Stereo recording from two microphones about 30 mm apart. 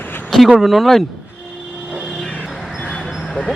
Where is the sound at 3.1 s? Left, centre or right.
Centre.